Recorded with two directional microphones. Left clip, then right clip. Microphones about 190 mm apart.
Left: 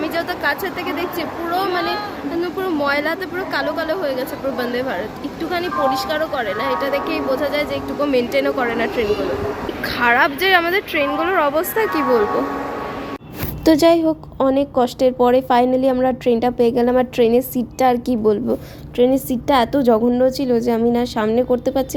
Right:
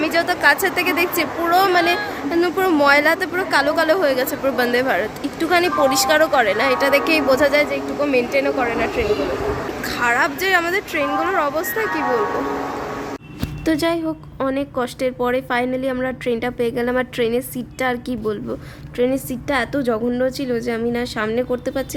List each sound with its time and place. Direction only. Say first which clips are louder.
0.0 s a woman's voice: right 4 dB; 10° right (ahead or behind)
8.0 s a woman's voice: left 1 dB; 5° left (ahead or behind); by 12.2 s 20° left (ahead or behind)
13.7 s a woman's voice: left 7 dB; 15° left (ahead or behind)